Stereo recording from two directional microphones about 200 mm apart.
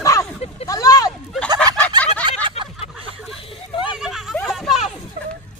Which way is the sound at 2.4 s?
25° right (ahead or behind).